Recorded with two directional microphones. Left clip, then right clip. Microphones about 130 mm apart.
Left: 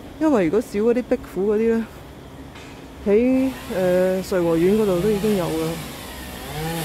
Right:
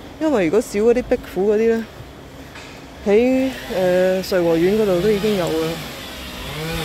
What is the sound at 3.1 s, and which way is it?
Speech, 5° left (ahead or behind).